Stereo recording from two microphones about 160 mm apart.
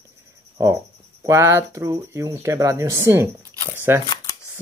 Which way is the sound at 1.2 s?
20° right (ahead or behind).